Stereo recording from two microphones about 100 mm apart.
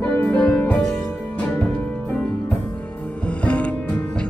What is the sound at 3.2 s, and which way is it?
Music, 10° left (ahead or behind).